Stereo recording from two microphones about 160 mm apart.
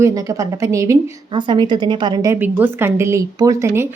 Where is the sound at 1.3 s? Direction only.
30° right (ahead or behind).